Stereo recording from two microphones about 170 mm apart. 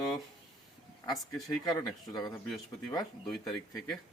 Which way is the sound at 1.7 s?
25° left (ahead or behind).